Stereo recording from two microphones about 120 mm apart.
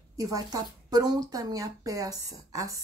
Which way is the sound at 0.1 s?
30° right (ahead or behind).